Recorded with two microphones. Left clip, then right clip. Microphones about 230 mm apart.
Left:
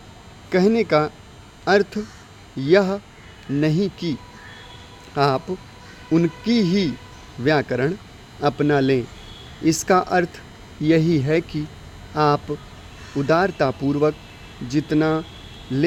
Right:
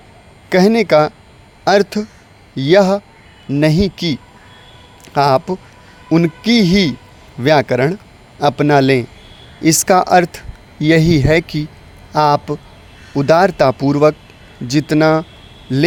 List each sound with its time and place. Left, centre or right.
0.5 s speech: right